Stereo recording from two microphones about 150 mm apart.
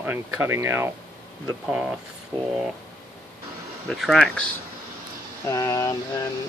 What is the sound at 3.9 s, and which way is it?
Speech, centre (ahead or behind).